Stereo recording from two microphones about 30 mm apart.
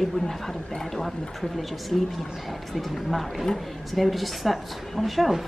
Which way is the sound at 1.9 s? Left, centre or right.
Centre.